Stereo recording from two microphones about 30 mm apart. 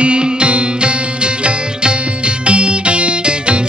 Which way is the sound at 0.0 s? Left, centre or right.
Right.